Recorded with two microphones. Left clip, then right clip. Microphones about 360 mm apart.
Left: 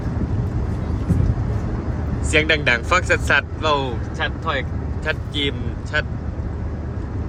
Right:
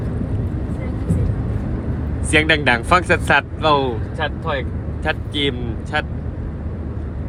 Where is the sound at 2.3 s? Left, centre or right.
Centre.